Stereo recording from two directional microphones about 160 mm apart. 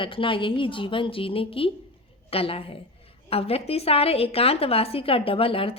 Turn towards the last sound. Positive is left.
turn(degrees=35)  # may be behind; listen again after turning